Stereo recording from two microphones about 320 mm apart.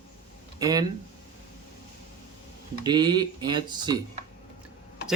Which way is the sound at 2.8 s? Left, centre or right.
Centre.